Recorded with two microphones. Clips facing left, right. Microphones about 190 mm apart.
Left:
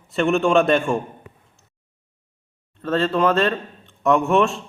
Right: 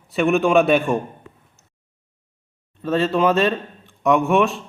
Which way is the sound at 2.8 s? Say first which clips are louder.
Right 1 dB; 15° right (ahead or behind).